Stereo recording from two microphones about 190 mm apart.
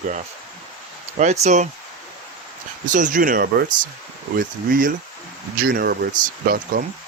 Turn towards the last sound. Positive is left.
turn(degrees=-45)  # may be behind; listen again after turning